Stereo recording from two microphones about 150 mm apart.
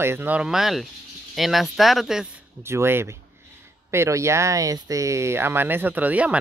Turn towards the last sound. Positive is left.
turn(degrees=-10)  # may be behind; listen again after turning